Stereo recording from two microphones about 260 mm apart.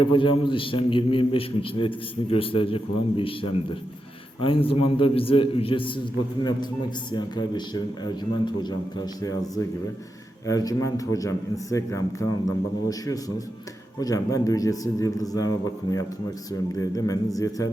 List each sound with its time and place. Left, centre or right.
0.2 s a man's voice: centre
7.1 s a man's voice: centre